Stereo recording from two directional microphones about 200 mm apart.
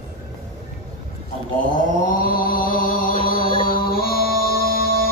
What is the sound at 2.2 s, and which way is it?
Music, 45° left (ahead or behind).